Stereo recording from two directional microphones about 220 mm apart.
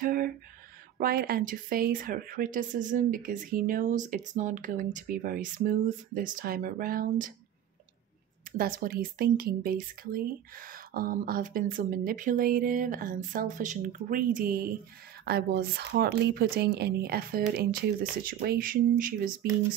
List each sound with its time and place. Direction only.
0.0 s speech: 40° right (ahead or behind)
8.5 s speech: 40° right (ahead or behind)